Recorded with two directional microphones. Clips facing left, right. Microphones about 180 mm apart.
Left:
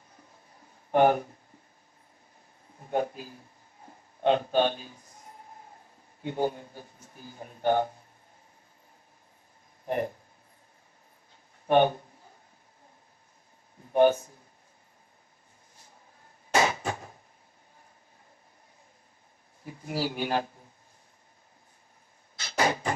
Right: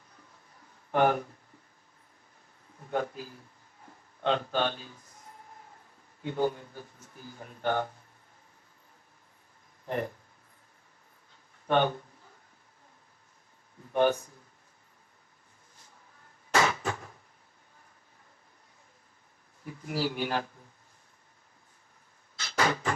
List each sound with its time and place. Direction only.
0.9 s speech: 20° left (ahead or behind)
2.8 s speech: 20° left (ahead or behind)
3.8 s a sound: 20° left (ahead or behind)
6.2 s speech: 20° left (ahead or behind)
9.8 s speech: 20° left (ahead or behind)
11.6 s speech: 15° left (ahead or behind)
13.9 s speech: 20° left (ahead or behind)
16.5 s a sound: 20° left (ahead or behind)
19.6 s speech: 20° left (ahead or behind)
22.4 s a sound: 20° left (ahead or behind)